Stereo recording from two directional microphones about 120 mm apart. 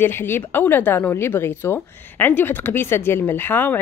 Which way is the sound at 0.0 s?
20° left (ahead or behind).